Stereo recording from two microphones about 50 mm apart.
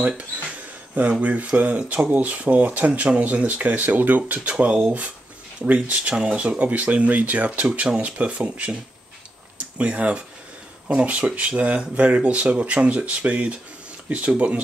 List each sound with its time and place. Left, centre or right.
1.2 s speech: right
7.6 s speech: right
9.8 s speech: right